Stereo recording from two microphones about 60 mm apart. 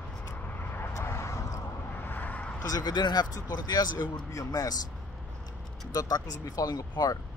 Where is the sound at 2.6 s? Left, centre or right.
Left.